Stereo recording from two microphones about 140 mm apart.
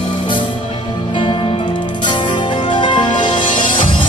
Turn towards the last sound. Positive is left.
turn(degrees=35)  # may be behind; listen again after turning